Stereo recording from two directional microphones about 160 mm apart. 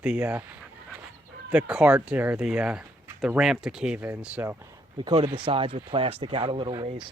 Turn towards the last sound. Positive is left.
turn(degrees=-30)  # may be behind; listen again after turning